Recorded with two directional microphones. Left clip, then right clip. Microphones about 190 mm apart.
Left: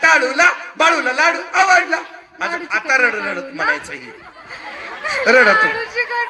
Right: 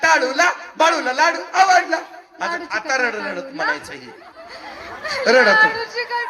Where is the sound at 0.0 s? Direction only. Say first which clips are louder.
Left 3 dB; 35° left (ahead or behind).